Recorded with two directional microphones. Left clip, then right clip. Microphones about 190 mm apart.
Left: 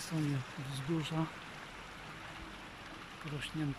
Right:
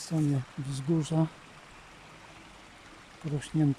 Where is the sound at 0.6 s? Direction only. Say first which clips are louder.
Right 7 dB; 30° right (ahead or behind).